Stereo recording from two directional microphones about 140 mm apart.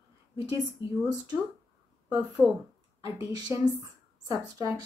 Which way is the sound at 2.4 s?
Centre (ahead or behind).